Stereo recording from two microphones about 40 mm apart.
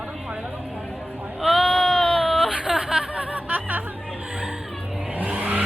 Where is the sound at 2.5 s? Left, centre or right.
Right.